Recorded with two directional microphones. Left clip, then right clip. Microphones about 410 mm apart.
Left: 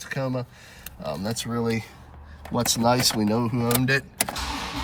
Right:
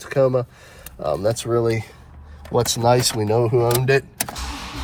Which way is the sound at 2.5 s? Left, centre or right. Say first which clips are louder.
Right 5 dB; centre.